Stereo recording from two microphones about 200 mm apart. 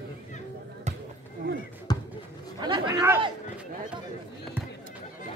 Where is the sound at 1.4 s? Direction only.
55° right (ahead or behind).